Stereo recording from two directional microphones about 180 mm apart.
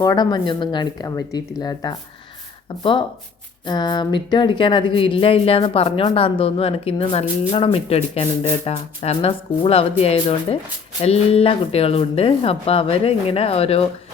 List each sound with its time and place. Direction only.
0.0 s speech: 20° left (ahead or behind)
3.7 s a woman's voice: 25° left (ahead or behind)